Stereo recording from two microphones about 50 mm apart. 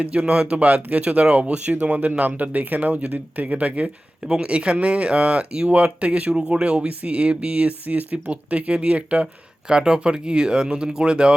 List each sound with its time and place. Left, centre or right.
0.0 s speech: right